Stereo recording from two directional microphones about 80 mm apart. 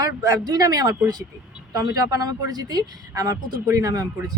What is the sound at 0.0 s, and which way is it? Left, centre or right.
Speech, right.